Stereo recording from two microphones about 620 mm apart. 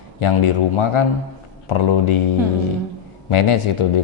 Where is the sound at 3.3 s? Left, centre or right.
Left.